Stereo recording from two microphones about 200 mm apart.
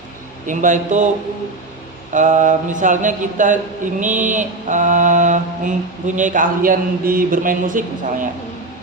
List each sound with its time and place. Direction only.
0.4 s mantra: 40° right (ahead or behind)
2.1 s mantra: 40° right (ahead or behind)
6.1 s a man's voice: 40° right (ahead or behind)